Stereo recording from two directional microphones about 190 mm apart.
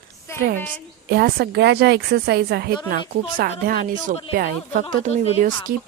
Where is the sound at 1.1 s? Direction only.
55° right (ahead or behind).